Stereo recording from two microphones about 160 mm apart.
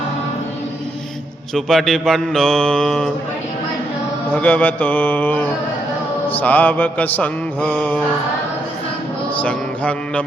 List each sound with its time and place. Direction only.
1.5 s mantra: centre (ahead or behind)
4.3 s mantra: 10° left (ahead or behind)
9.4 s mantra: 10° left (ahead or behind)